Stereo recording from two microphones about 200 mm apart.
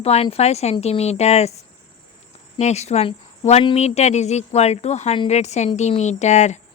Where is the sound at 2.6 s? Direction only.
35° left (ahead or behind).